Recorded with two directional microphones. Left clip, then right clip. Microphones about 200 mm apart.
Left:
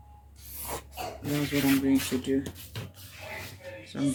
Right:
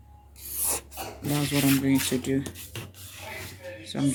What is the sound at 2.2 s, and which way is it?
Speech, 55° right (ahead or behind).